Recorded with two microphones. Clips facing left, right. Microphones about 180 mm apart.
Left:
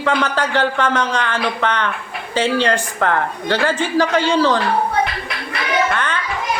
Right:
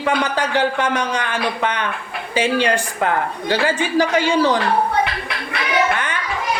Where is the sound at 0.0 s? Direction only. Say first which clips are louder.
Left 1 dB; 15° right (ahead or behind).